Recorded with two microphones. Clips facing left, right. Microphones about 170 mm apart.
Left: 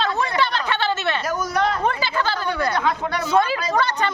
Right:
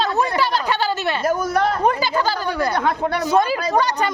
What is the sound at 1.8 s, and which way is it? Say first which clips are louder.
Speech: right 4 dB; 40° right (ahead or behind).